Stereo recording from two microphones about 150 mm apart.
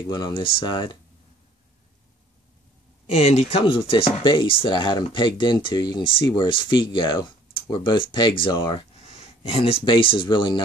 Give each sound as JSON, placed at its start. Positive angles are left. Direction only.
{"t": 0.1, "sound": "speech", "side_deg": 30}
{"t": 3.1, "sound": "speech", "side_deg": 45}
{"t": 9.0, "sound": "speech", "side_deg": 40}